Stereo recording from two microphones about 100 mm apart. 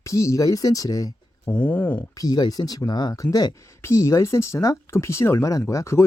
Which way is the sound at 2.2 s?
40° left (ahead or behind).